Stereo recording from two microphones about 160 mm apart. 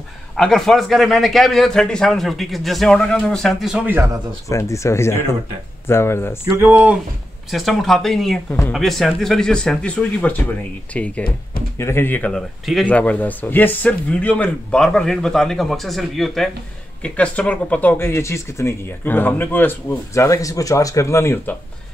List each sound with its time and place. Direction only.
0.4 s a man's voice: centre (ahead or behind); by 4.2 s 15° right (ahead or behind)
4.5 s speech: 20° left (ahead or behind)
6.5 s speech: 10° right (ahead or behind)
7.5 s a man's voice: centre (ahead or behind); by 21.5 s 15° left (ahead or behind)